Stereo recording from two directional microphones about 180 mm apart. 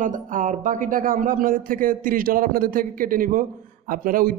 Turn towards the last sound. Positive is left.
turn(degrees=-50)  # may be behind; listen again after turning